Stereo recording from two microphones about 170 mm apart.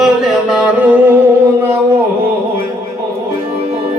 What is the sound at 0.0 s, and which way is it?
Mantra, 5° right (ahead or behind).